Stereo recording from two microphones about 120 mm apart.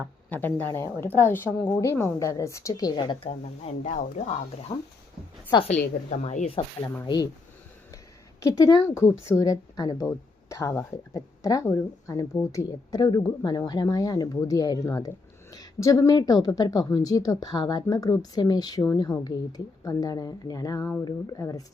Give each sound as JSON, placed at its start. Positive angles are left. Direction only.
{"t": 0.3, "sound": "speech", "side_deg": 15}
{"t": 3.2, "sound": "speech", "side_deg": 75}
{"t": 4.7, "sound": "speech", "side_deg": 25}
{"t": 5.6, "sound": "a woman's voice", "side_deg": 65}
{"t": 8.4, "sound": "a woman's voice", "side_deg": 30}